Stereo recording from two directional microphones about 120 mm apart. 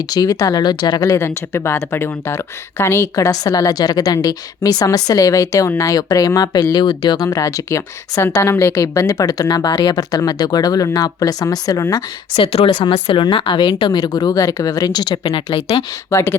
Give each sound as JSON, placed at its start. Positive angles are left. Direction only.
{"t": 0.1, "sound": "speech", "side_deg": 35}
{"t": 12.4, "sound": "speech", "side_deg": 50}
{"t": 16.0, "sound": "speech", "side_deg": 25}